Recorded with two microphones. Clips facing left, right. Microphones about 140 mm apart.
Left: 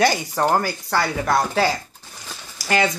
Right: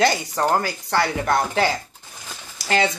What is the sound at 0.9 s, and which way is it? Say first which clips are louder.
Speech: right 1 dB; 20° right (ahead or behind).